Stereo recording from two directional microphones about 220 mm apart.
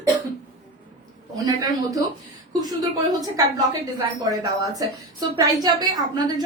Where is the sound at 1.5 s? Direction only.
15° right (ahead or behind).